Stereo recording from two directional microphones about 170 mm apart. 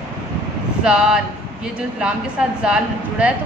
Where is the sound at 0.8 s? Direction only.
5° right (ahead or behind).